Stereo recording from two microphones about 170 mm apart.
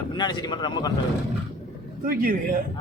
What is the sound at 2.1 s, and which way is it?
Speech, 55° right (ahead or behind).